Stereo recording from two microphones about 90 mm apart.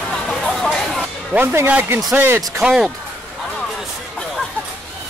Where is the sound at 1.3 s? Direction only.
20° right (ahead or behind).